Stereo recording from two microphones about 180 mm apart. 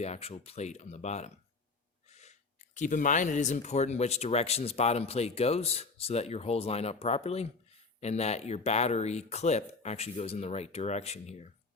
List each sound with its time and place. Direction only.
0.0 s speech: 35° left (ahead or behind)